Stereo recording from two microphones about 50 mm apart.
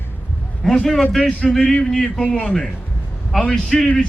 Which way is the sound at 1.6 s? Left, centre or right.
Centre.